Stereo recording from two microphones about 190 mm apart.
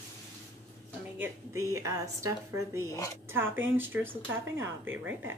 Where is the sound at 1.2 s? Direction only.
15° right (ahead or behind).